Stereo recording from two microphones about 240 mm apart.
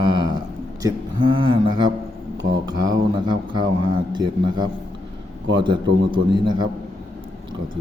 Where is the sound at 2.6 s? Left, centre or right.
Centre.